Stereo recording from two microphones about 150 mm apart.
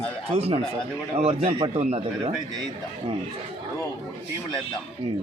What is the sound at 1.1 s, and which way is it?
Speech, 40° right (ahead or behind).